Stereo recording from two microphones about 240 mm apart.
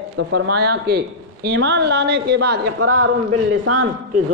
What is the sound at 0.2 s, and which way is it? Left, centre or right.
Speech, right.